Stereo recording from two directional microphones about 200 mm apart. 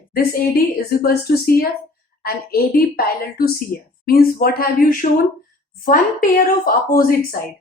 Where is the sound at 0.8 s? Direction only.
50° left (ahead or behind).